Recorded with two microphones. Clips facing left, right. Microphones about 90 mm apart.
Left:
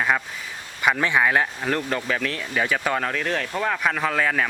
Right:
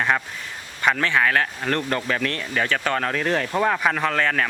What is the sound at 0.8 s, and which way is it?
Speech, 10° left (ahead or behind).